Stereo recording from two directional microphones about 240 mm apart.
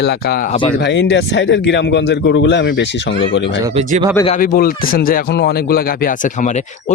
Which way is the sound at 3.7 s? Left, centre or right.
Right.